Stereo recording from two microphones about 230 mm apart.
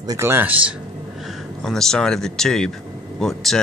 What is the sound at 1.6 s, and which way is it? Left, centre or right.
Speech, centre.